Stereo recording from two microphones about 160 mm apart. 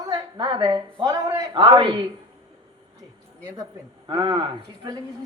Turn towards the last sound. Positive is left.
turn(degrees=-25)  # may be behind; listen again after turning